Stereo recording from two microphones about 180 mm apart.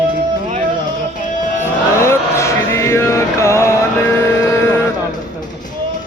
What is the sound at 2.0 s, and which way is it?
Chant, 15° left (ahead or behind).